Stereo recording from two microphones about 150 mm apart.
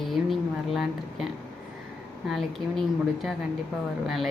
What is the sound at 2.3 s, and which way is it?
Speech, centre (ahead or behind).